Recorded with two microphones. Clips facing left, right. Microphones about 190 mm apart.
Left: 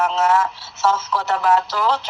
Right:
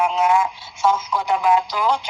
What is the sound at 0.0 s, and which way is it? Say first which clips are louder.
Speech: even; 10° right (ahead or behind).